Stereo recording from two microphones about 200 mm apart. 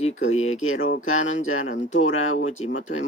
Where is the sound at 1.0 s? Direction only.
80° left.